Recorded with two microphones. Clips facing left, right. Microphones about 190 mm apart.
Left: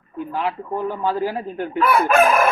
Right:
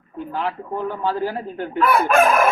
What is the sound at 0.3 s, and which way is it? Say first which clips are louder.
Chicken: left 1 dB; 5° left (ahead or behind).